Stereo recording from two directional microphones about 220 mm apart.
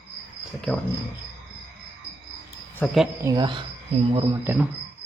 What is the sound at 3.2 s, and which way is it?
Speech, 20° right (ahead or behind).